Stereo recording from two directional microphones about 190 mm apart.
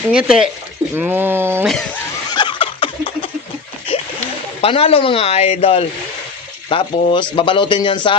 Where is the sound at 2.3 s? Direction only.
25° left (ahead or behind).